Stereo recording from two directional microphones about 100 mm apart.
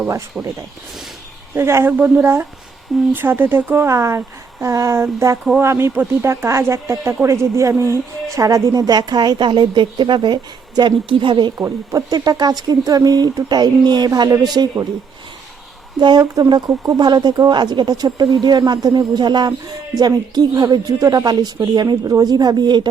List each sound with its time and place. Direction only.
0.4 s speech: 10° right (ahead or behind)
1.5 s speech: 25° right (ahead or behind); by 11.5 s 55° right (ahead or behind)
11.5 s speech: 30° right (ahead or behind)
16.0 s speech: 45° right (ahead or behind)